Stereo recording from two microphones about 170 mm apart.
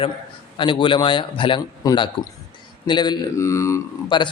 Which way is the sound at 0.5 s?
30° left (ahead or behind).